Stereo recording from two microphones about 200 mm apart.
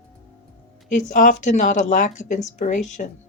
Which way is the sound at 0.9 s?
40° left (ahead or behind).